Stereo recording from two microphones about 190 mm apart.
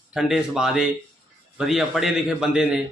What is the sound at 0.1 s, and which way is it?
A man's voice, centre (ahead or behind).